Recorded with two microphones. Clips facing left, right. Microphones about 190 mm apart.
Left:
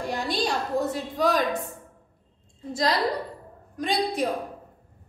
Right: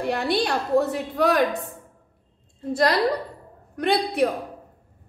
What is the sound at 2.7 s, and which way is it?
A woman's voice, 60° right (ahead or behind).